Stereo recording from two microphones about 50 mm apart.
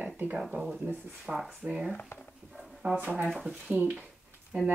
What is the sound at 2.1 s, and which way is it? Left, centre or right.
Speech, left.